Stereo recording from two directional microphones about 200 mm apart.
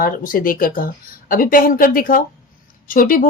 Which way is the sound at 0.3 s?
45° left (ahead or behind).